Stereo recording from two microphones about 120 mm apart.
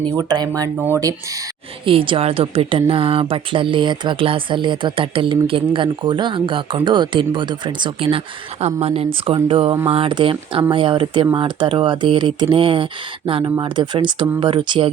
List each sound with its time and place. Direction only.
0.0 s speech: 35° right (ahead or behind)
1.8 s speech: 45° right (ahead or behind)
8.6 s speech: 60° right (ahead or behind)